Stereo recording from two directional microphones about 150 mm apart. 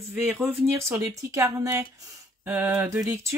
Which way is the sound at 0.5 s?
20° right (ahead or behind).